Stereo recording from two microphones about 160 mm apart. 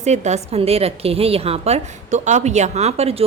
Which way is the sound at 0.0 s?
45° right (ahead or behind).